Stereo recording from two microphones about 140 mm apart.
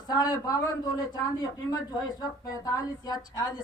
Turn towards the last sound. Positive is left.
turn(degrees=30)  # may be behind; listen again after turning